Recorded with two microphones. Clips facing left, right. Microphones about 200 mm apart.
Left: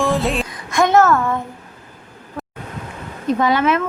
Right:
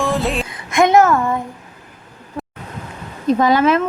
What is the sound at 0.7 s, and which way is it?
Speech, 20° right (ahead or behind).